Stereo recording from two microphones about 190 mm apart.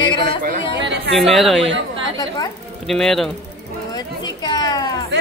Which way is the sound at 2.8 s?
Centre (ahead or behind).